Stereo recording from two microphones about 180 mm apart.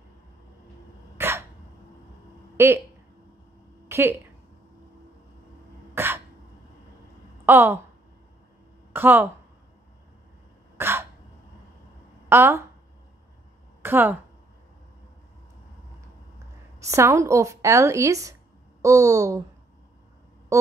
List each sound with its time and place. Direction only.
1.1 s cough: 15° right (ahead or behind)
2.5 s speech: 15° right (ahead or behind)
3.9 s speech: 15° right (ahead or behind)
5.9 s throat clearing: 10° right (ahead or behind)
7.4 s speech: 15° right (ahead or behind)
8.9 s speech: 10° right (ahead or behind)
10.8 s throat clearing: 15° right (ahead or behind)
12.3 s speech: 15° right (ahead or behind)
13.8 s a woman's voice: 10° right (ahead or behind)
16.8 s speech: 15° right (ahead or behind)